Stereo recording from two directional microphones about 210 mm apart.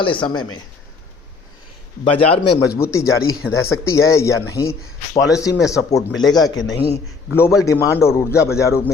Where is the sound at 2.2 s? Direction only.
25° left (ahead or behind).